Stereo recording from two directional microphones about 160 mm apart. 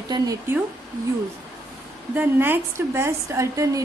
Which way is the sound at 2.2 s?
15° right (ahead or behind).